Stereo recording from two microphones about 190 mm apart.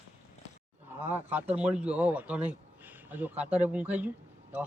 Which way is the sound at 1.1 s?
10° right (ahead or behind).